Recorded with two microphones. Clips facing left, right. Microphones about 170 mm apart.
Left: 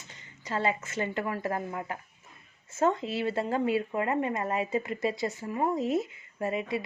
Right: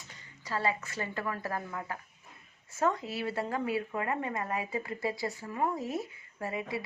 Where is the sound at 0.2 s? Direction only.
20° left (ahead or behind).